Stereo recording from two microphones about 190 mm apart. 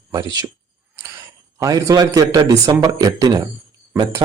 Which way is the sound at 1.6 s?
20° right (ahead or behind).